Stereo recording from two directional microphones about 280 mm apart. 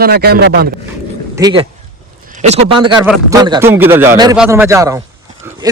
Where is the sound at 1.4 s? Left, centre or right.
Centre.